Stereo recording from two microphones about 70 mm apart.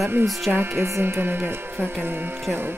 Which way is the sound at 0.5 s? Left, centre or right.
Right.